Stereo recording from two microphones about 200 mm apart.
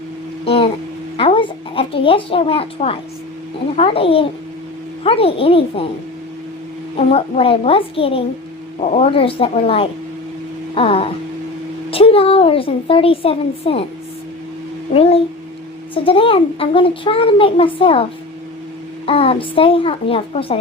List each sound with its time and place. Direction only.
0.4 s speech: 30° left (ahead or behind)
1.1 s a sound: 25° left (ahead or behind)
3.8 s a woman's voice: 30° left (ahead or behind)
6.9 s a woman's voice: 30° left (ahead or behind)
14.9 s a woman's voice: 30° left (ahead or behind)
19.0 s a woman's voice: 30° left (ahead or behind)